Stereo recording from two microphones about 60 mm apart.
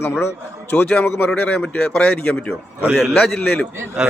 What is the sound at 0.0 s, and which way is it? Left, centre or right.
Speech, left.